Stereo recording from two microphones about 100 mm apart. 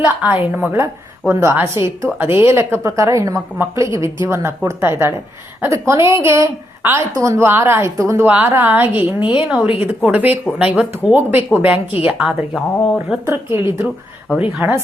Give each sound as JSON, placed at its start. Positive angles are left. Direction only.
{"t": 0.0, "sound": "a woman's voice", "side_deg": -15}
{"t": 12.1, "sound": "speech", "side_deg": 0}
{"t": 13.2, "sound": "a woman's voice", "side_deg": -20}